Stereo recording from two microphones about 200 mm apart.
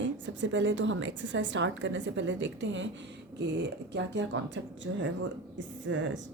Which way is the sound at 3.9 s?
65° right (ahead or behind).